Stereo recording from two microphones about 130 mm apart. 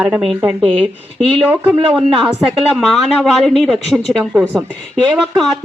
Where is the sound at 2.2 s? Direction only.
Centre (ahead or behind).